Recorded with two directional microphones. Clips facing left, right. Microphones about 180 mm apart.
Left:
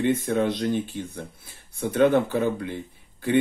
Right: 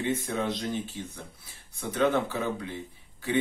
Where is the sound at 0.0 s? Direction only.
60° left (ahead or behind).